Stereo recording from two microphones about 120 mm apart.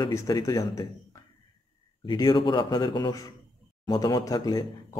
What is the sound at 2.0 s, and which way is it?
Speech, 35° left (ahead or behind).